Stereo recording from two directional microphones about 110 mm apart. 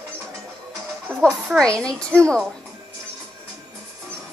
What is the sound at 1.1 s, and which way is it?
Speech, 20° right (ahead or behind).